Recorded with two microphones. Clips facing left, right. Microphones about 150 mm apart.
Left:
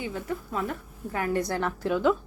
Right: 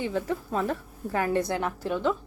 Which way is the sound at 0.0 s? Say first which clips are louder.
Right 4 dB; 30° right (ahead or behind).